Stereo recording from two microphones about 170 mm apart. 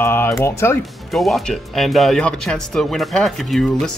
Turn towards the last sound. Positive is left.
turn(degrees=0)  # may be behind; listen again after turning